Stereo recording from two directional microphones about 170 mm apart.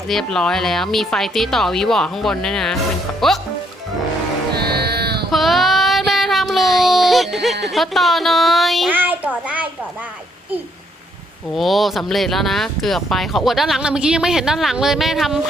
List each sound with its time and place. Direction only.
0.1 s speech: 5° left (ahead or behind)
4.5 s livestock: 70° right (ahead or behind)
5.3 s child singing: centre (ahead or behind)
7.6 s speech: centre (ahead or behind)
8.9 s a child's voice: 10° right (ahead or behind)
11.5 s speech: centre (ahead or behind)